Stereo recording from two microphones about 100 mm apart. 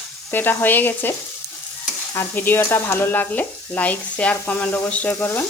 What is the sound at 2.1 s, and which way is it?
Sizzle, 20° left (ahead or behind).